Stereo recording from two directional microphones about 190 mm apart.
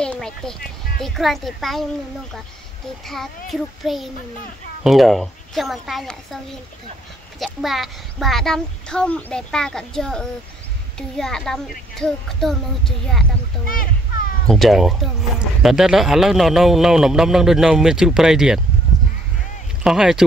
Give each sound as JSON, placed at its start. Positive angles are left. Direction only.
{"t": 0.0, "sound": "music", "side_deg": 5}
{"t": 1.0, "sound": "speech", "side_deg": 0}
{"t": 3.1, "sound": "speech", "side_deg": 0}
{"t": 13.7, "sound": "a child's voice", "side_deg": 50}
{"t": 14.5, "sound": "speech", "side_deg": 0}
{"t": 19.8, "sound": "speech", "side_deg": -5}